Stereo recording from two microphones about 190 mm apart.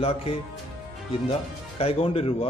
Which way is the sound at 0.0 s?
30° left (ahead or behind).